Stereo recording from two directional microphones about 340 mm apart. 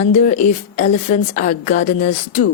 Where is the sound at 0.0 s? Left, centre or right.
Left.